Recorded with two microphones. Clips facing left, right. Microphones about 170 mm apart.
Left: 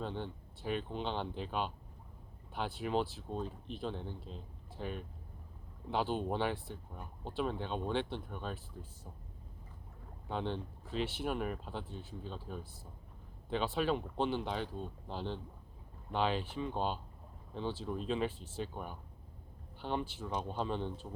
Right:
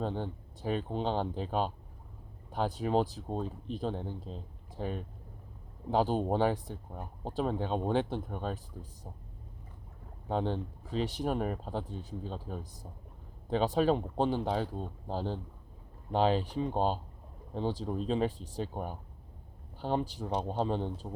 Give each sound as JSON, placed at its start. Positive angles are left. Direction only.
{"t": 0.0, "sound": "speech", "side_deg": -40}
{"t": 10.2, "sound": "speech", "side_deg": -40}